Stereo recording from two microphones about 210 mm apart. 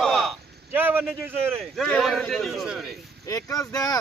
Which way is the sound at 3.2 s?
15° left (ahead or behind).